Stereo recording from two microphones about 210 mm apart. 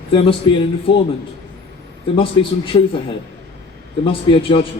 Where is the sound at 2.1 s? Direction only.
25° left (ahead or behind).